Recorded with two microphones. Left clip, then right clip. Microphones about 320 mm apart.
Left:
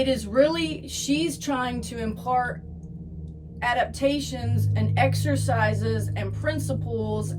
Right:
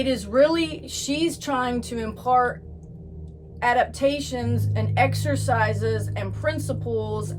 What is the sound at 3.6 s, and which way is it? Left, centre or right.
A woman's voice, centre.